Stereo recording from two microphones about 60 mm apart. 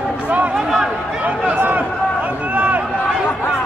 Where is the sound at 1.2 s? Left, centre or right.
Right.